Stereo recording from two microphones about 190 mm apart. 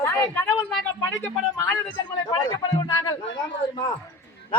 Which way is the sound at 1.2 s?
10° left (ahead or behind).